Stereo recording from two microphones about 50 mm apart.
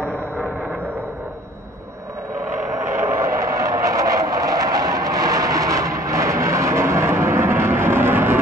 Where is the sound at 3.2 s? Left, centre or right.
Right.